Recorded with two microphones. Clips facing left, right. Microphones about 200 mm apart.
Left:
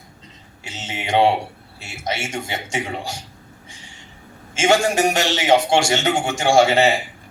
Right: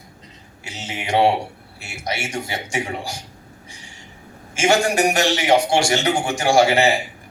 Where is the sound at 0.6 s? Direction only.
25° left (ahead or behind).